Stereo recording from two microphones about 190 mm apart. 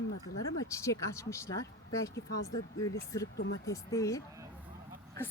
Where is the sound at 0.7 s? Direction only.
15° left (ahead or behind).